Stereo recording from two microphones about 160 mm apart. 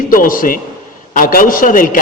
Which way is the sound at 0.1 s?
60° left (ahead or behind).